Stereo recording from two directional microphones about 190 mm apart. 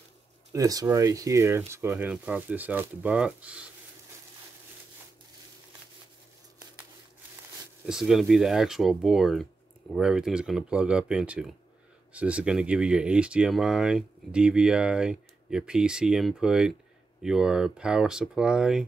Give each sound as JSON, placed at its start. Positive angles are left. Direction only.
{"t": 0.5, "sound": "speech", "side_deg": -20}
{"t": 7.8, "sound": "speech", "side_deg": -5}